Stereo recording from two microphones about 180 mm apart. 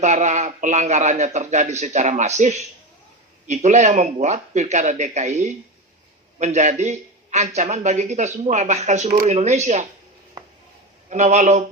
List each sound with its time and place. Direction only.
0.0 s a man's voice: 40° right (ahead or behind)
11.1 s a man's voice: 40° right (ahead or behind)